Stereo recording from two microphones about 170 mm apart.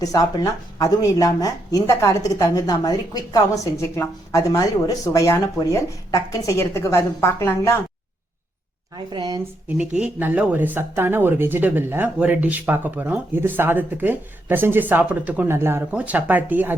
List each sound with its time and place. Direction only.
0.0 s speech: 20° left (ahead or behind)
9.0 s a woman's voice: 25° right (ahead or behind)
10.0 s speech: 10° right (ahead or behind)